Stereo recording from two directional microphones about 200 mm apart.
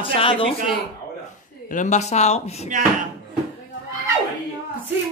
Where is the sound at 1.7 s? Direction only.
40° left (ahead or behind).